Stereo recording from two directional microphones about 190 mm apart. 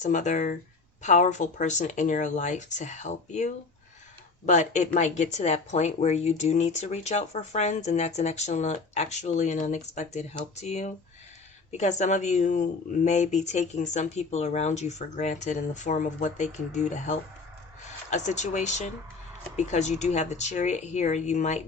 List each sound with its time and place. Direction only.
0.0 s speech: 40° left (ahead or behind)